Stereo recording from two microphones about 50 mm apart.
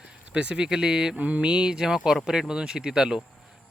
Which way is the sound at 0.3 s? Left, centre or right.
Right.